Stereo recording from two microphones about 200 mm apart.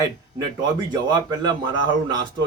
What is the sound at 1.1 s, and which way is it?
Speech, 20° right (ahead or behind).